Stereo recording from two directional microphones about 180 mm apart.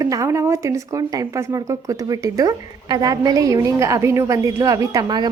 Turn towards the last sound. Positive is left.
turn(degrees=-20)  # may be behind; listen again after turning